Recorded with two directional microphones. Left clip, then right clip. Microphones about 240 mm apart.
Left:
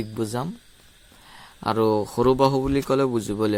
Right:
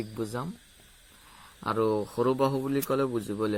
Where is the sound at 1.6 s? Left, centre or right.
Left.